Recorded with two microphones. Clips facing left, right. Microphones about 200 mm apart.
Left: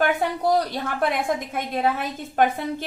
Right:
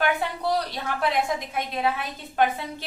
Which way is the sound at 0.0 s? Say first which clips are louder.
Left 4 dB; 45° left (ahead or behind).